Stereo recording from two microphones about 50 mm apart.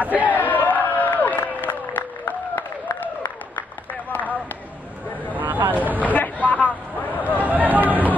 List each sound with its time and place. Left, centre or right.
0.0 s chant: right
0.3 s crowd: left
5.3 s vehicle: right
6.1 s vehicle: left
7.4 s a sound: right